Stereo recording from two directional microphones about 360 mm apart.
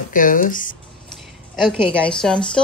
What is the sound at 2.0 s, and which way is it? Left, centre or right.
Speech, centre.